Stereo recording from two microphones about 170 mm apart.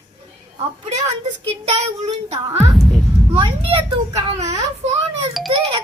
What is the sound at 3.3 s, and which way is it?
Speech, 30° right (ahead or behind).